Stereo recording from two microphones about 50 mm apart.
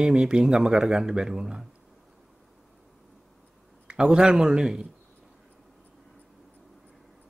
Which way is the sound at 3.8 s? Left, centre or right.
Centre.